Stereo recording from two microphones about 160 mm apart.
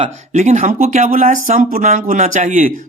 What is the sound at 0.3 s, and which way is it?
Speech, 50° right (ahead or behind).